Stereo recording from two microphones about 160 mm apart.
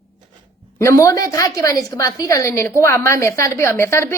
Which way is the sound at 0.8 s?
20° left (ahead or behind).